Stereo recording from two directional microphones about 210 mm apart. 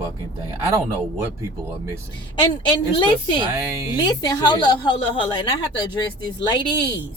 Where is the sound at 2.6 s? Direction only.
20° left (ahead or behind).